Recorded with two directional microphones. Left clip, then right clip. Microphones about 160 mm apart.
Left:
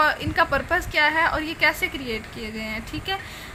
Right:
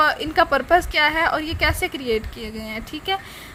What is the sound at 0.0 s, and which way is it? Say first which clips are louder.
A woman's voice: right 3 dB; 50° right (ahead or behind).